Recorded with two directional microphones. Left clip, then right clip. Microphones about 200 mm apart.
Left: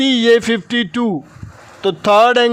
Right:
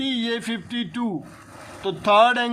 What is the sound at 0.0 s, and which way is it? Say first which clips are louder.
A man's voice: left 14 dB; 50° left (ahead or behind).